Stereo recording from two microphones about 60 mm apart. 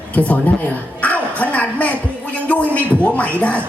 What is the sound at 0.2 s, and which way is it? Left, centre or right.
Speech, left.